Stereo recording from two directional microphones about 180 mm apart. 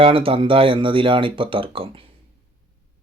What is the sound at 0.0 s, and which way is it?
Speech, 30° right (ahead or behind).